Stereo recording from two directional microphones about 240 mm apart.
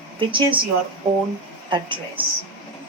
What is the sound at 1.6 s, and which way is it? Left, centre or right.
Speech, centre.